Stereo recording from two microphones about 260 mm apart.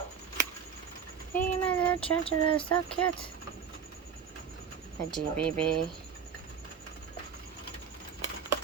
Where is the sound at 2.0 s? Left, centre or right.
Left.